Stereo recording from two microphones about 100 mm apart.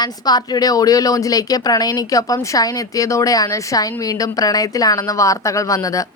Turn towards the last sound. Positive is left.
turn(degrees=35)  # may be behind; listen again after turning